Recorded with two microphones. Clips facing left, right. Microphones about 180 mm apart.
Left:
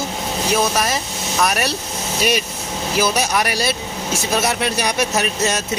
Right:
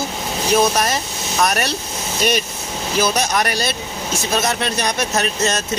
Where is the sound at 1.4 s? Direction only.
5° left (ahead or behind).